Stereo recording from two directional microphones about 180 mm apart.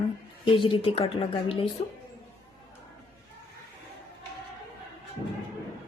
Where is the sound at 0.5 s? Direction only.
30° left (ahead or behind).